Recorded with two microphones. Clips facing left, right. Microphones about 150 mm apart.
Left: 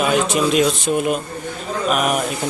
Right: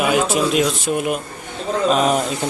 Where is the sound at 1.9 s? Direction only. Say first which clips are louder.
Right 2 dB; 25° right (ahead or behind).